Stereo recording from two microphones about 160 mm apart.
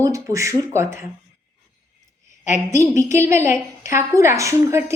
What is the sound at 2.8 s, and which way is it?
A woman's voice, 20° right (ahead or behind).